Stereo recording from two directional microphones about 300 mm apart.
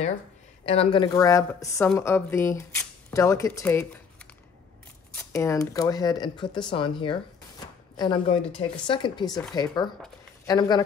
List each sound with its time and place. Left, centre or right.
0.7 s a woman's voice: centre